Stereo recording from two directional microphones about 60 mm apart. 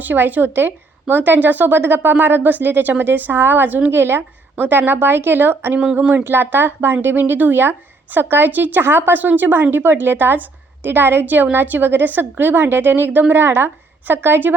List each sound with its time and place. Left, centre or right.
0.1 s a woman's voice: right